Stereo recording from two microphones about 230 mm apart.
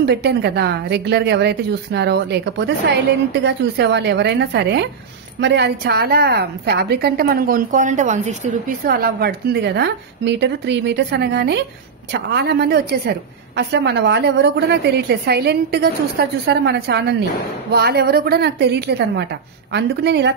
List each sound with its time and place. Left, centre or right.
0.0 s a woman's voice: right